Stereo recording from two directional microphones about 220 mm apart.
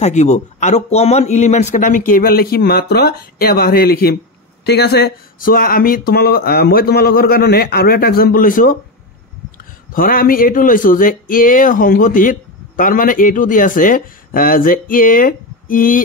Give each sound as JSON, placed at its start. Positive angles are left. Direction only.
{"t": 0.0, "sound": "speech", "side_deg": 30}
{"t": 9.9, "sound": "speech", "side_deg": 40}